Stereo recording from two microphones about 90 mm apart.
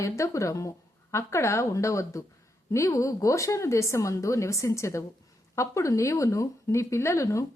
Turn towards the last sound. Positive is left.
turn(degrees=35)  # may be behind; listen again after turning